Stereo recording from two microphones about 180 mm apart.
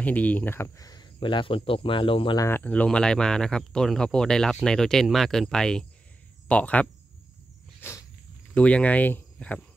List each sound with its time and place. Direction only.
0.0 s speech: 10° left (ahead or behind); by 2.4 s 30° left (ahead or behind)
2.4 s speech: 10° left (ahead or behind)
7.8 s walk: 15° left (ahead or behind)
8.5 s speech: 5° left (ahead or behind)